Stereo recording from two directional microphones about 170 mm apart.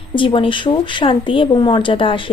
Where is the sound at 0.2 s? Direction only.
30° left (ahead or behind).